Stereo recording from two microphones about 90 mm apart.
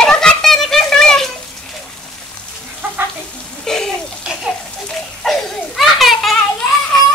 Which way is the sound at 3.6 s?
5° left (ahead or behind).